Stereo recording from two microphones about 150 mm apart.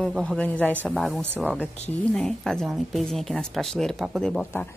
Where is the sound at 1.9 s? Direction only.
5° left (ahead or behind).